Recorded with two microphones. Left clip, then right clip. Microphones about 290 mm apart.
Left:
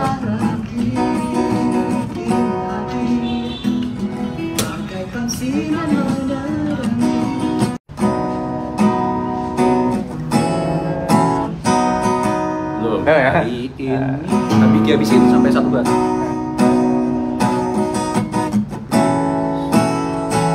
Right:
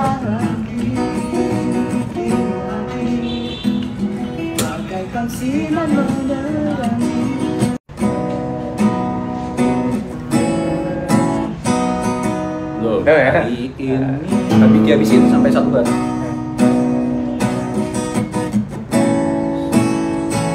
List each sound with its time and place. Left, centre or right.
0.9 s music: centre
7.0 s music: centre
13.1 s a sound: centre
14.5 s music: centre
15.8 s music: centre
18.9 s music: centre